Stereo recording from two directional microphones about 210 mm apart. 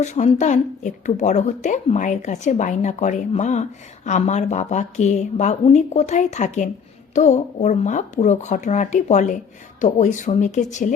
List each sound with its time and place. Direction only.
0.0 s a woman's voice: 35° left (ahead or behind)